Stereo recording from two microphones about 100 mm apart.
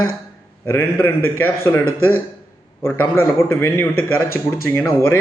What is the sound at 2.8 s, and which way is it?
A man's voice, 25° left (ahead or behind).